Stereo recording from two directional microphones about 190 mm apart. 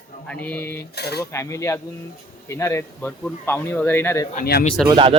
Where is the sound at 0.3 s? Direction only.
10° left (ahead or behind).